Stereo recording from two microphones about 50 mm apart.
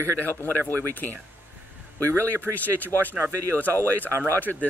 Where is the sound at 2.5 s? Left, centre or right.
Left.